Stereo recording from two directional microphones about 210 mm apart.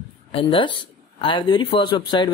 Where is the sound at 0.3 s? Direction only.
25° left (ahead or behind).